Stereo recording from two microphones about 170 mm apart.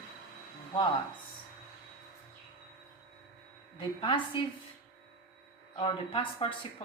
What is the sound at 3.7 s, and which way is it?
Speech, 30° left (ahead or behind).